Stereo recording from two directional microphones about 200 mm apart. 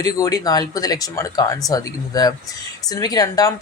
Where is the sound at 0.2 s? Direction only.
20° left (ahead or behind).